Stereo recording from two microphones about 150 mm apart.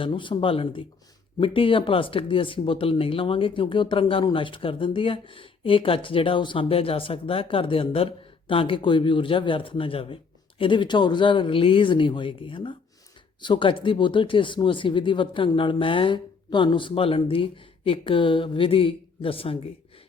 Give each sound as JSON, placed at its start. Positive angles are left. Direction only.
{"t": 0.0, "sound": "speech", "side_deg": 35}